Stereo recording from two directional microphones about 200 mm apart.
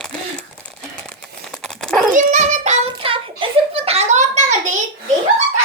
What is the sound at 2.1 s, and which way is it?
Child singing, 35° right (ahead or behind).